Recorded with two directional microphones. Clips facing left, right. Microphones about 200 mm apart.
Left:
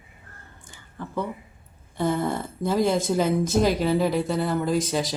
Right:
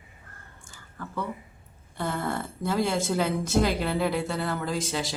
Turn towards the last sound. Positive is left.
turn(degrees=20)  # may be behind; listen again after turning